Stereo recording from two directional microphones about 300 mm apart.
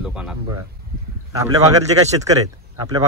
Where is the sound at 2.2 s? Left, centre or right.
Centre.